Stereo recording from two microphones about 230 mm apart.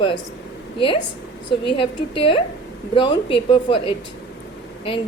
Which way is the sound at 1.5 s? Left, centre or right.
Left.